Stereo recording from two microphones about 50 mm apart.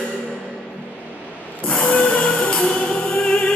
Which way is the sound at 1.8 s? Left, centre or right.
Left.